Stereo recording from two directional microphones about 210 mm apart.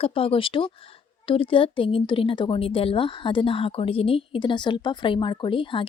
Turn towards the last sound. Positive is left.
turn(degrees=25)  # may be behind; listen again after turning